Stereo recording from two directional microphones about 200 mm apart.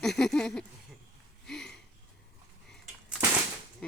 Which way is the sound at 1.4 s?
5° left (ahead or behind).